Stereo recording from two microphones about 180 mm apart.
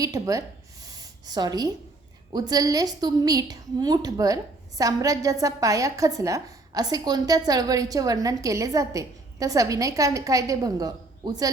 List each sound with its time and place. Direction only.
0.0 s a woman's voice: 20° right (ahead or behind)
0.9 s a sound: 20° right (ahead or behind)
2.3 s a woman's voice: 20° right (ahead or behind)